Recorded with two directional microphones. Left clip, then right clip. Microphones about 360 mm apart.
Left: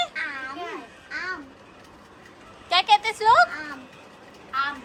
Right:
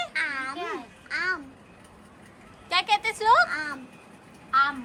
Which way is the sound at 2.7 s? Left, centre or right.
Centre.